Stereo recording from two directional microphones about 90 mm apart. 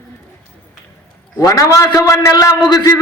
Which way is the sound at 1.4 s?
40° left (ahead or behind).